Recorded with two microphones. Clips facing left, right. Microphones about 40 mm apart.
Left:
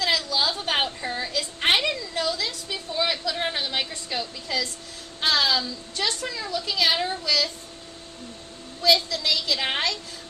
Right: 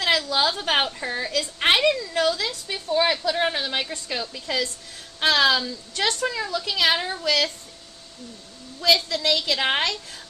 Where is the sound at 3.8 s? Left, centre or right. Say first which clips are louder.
Right 1 dB; right.